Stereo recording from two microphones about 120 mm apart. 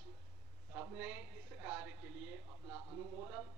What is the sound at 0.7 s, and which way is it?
A woman's voice, 15° right (ahead or behind).